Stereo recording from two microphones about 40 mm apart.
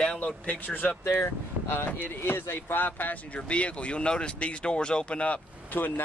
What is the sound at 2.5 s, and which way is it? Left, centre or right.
Speech, left.